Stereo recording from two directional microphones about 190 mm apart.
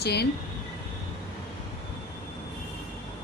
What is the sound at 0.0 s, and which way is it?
Speech, 60° left (ahead or behind).